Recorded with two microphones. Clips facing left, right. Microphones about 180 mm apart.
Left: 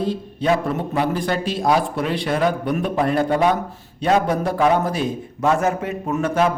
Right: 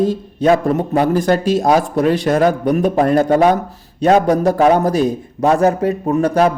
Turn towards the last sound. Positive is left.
turn(degrees=-40)  # may be behind; listen again after turning